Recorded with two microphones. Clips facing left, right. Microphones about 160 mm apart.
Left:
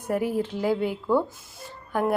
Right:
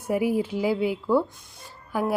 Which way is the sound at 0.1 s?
10° right (ahead or behind).